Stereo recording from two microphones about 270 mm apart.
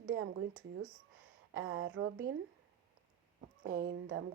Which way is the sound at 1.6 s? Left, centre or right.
Right.